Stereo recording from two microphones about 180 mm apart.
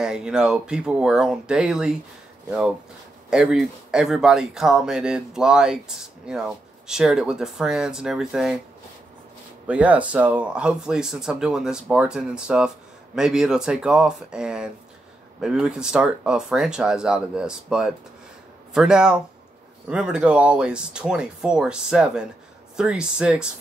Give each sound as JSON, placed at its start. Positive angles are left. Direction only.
{"t": 0.0, "sound": "speech", "side_deg": -5}
{"t": 3.3, "sound": "speech", "side_deg": -5}
{"t": 9.7, "sound": "speech", "side_deg": -5}